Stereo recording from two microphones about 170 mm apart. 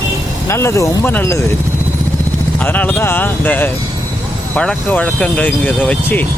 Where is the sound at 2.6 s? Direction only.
10° left (ahead or behind).